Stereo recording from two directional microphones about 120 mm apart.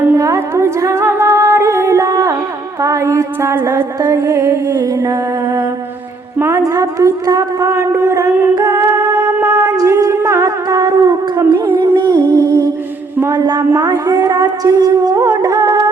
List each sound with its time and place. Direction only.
0.1 s humming: 25° right (ahead or behind)
2.8 s music: 25° right (ahead or behind)
6.4 s music: 25° right (ahead or behind)
9.6 s a sound: 30° right (ahead or behind)
13.3 s a woman's voice: 35° right (ahead or behind)
13.8 s music: 30° right (ahead or behind)